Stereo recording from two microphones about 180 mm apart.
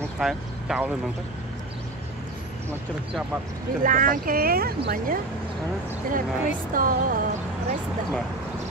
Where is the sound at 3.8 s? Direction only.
45° right (ahead or behind).